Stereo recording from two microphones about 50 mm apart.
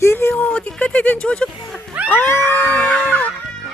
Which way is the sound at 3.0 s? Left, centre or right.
Left.